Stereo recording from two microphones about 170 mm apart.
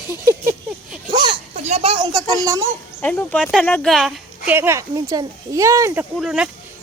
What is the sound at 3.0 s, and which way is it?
Speech, 10° left (ahead or behind).